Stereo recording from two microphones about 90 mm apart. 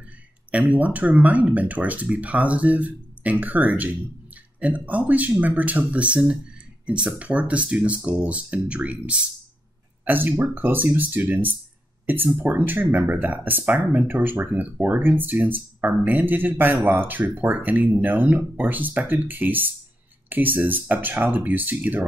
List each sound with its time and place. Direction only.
0.5 s speech: 15° right (ahead or behind)